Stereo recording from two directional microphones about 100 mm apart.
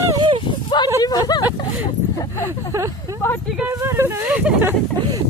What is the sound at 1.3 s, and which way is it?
Vehicle, 40° left (ahead or behind).